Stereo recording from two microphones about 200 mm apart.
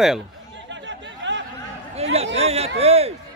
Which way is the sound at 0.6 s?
65° right (ahead or behind).